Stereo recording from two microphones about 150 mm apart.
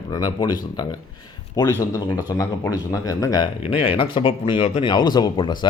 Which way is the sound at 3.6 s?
35° left (ahead or behind).